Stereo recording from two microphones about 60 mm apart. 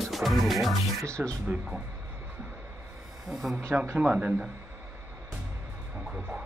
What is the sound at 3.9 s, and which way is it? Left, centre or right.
Speech, centre.